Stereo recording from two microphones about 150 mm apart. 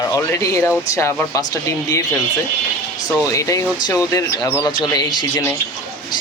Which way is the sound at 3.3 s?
20° left (ahead or behind).